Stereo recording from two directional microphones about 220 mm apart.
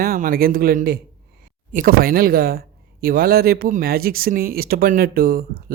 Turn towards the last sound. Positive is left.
turn(degrees=-45)  # may be behind; listen again after turning